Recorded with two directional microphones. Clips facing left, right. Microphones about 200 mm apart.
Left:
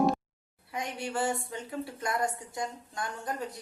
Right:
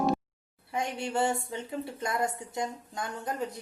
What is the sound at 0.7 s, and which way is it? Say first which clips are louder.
A woman's voice: right 3 dB; 25° right (ahead or behind).